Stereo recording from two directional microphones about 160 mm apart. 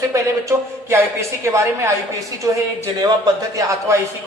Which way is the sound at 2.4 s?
20° right (ahead or behind).